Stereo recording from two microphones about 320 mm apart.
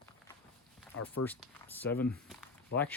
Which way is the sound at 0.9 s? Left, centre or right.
Left.